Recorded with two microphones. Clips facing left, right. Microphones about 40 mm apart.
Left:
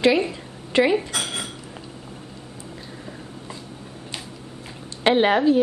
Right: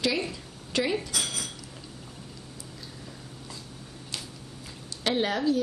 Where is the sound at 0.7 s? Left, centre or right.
Left.